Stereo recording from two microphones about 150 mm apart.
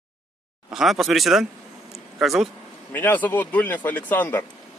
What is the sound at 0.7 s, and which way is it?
Speech, centre (ahead or behind).